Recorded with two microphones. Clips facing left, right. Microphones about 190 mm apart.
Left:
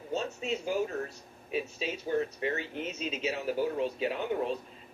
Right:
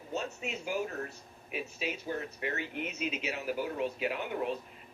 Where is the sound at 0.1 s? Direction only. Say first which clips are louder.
Left 4 dB; 30° left (ahead or behind).